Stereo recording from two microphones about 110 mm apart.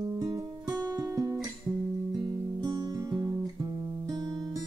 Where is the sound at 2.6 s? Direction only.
40° right (ahead or behind).